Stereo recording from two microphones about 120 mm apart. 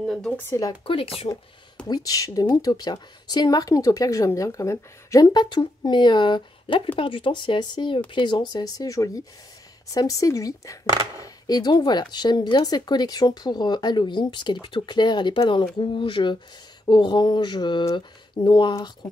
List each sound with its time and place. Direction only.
0.0 s speech: centre (ahead or behind)
0.4 s speech: 25° left (ahead or behind)
0.8 s speech: 50° left (ahead or behind)
1.9 s speech: 30° left (ahead or behind)